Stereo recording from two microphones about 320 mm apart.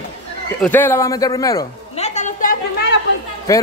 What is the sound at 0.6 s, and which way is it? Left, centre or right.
A woman's voice, centre.